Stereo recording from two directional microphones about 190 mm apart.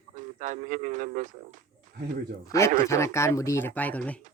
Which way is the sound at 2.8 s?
15° left (ahead or behind).